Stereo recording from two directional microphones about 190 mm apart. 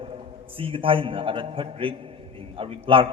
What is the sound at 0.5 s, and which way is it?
A man's voice, 30° right (ahead or behind).